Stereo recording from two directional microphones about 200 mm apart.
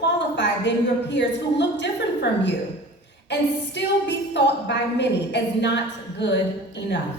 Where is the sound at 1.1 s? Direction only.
60° left (ahead or behind).